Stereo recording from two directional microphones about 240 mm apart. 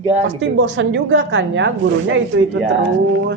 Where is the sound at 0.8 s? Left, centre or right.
Right.